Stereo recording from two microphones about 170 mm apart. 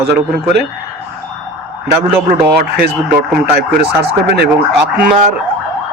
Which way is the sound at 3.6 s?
75° right (ahead or behind).